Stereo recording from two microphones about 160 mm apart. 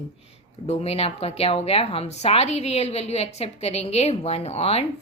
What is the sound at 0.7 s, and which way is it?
A woman's voice, 40° left (ahead or behind).